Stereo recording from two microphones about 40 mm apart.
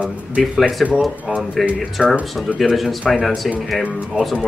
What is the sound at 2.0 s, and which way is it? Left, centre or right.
Speech, right.